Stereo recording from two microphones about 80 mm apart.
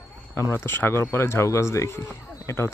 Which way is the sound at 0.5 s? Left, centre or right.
Left.